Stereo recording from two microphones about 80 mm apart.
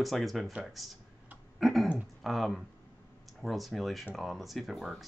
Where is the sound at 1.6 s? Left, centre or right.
Centre.